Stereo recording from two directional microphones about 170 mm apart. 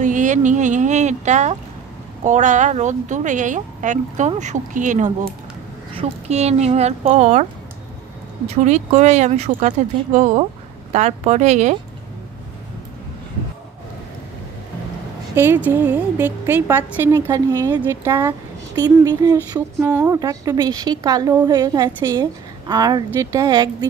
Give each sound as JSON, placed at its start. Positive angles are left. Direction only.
{"t": 0.0, "sound": "a woman's voice", "side_deg": -45}
{"t": 8.5, "sound": "a woman's voice", "side_deg": -40}
{"t": 15.3, "sound": "a woman's voice", "side_deg": -10}